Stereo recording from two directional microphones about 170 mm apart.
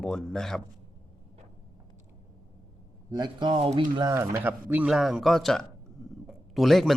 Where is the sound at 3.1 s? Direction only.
25° right (ahead or behind).